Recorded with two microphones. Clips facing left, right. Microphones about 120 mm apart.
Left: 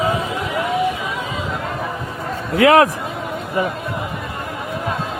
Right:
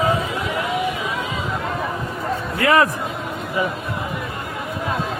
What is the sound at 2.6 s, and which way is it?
Speech, 75° left (ahead or behind).